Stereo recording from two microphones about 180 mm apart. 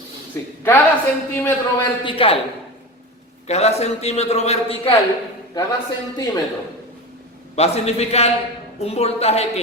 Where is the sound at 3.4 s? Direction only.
35° left (ahead or behind).